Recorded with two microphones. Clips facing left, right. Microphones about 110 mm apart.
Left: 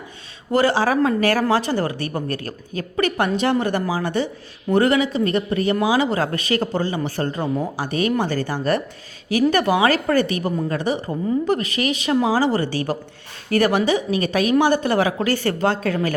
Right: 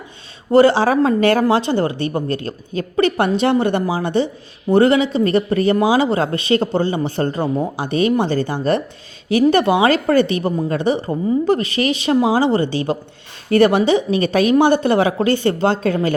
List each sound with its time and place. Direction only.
0.5 s speech: 30° right (ahead or behind)